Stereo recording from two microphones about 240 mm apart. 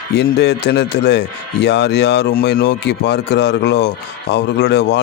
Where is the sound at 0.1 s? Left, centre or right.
Left.